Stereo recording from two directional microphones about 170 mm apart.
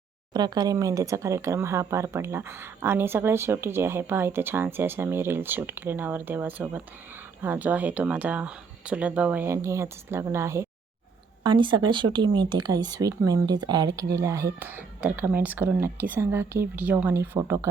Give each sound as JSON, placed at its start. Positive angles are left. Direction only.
{"t": 0.3, "sound": "speech", "side_deg": -25}
{"t": 11.4, "sound": "speech", "side_deg": -30}